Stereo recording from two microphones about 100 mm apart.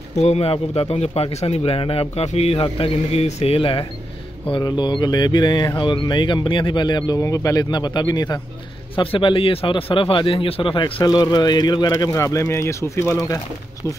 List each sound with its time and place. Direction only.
0.1 s a man's voice: 90° left; by 3.8 s 65° left (ahead or behind)
4.5 s speech: 50° left (ahead or behind)
7.2 s speech: 35° left (ahead or behind)
7.7 s speech: 50° left (ahead or behind)
8.9 s speech: 60° left (ahead or behind)
11.1 s speech: 45° left (ahead or behind); by 13.2 s 30° left (ahead or behind)